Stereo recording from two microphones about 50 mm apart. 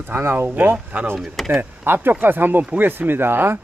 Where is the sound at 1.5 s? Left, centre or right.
Right.